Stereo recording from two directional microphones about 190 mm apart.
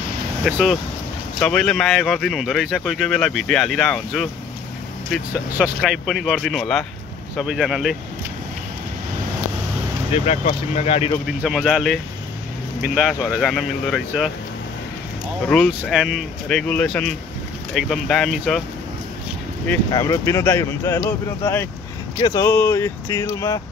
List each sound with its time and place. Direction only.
0.5 s speech: 5° right (ahead or behind)
10.1 s speech: 35° left (ahead or behind)
11.2 s speech: centre (ahead or behind)
15.4 s speech: centre (ahead or behind)
19.9 s speech: 15° left (ahead or behind)
22.2 s speech: 15° left (ahead or behind)